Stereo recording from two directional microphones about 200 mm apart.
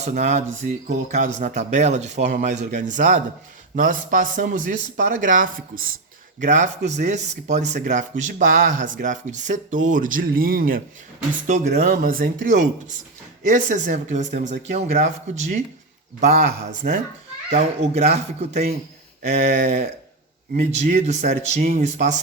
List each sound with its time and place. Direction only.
0.0 s speech: 35° right (ahead or behind)
17.5 s speech: 30° right (ahead or behind)